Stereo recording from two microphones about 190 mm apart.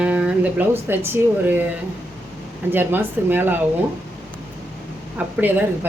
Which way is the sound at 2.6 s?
10° right (ahead or behind).